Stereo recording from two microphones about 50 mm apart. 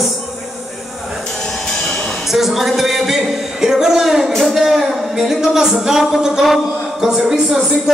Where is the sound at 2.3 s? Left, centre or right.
Centre.